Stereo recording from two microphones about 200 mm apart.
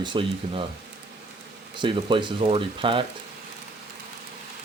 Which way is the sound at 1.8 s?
25° right (ahead or behind).